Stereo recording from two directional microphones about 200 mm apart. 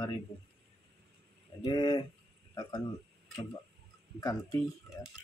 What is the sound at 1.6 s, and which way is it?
Speech, 20° left (ahead or behind).